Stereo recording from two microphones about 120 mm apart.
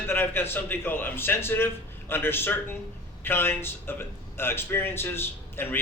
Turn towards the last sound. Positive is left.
turn(degrees=20)  # may be behind; listen again after turning